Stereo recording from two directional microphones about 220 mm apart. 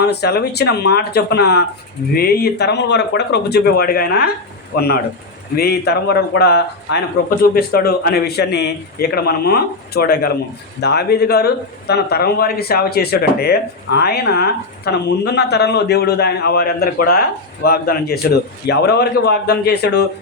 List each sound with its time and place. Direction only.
0.0 s speech: 50° left (ahead or behind)
5.5 s speech: 45° left (ahead or behind)